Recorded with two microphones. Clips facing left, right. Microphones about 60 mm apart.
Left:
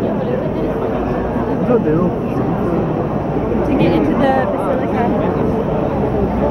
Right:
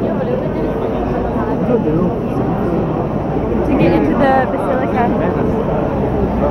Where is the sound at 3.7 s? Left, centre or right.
Right.